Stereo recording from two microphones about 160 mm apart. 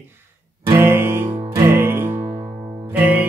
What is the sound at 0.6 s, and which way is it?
Music, 15° right (ahead or behind).